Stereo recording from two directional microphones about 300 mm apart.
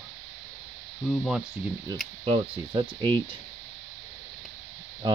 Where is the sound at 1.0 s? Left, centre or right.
Centre.